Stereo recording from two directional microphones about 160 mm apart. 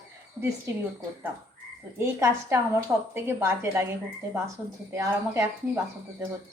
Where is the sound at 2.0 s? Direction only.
15° right (ahead or behind).